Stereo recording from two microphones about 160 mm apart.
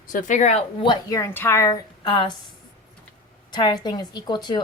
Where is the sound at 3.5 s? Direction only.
25° left (ahead or behind).